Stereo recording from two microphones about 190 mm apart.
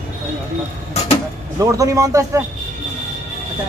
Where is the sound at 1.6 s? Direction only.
15° right (ahead or behind).